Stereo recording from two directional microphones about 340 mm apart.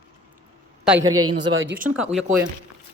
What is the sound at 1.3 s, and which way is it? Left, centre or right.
Speech, right.